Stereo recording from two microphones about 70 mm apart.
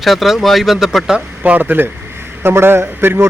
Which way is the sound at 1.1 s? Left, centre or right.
Right.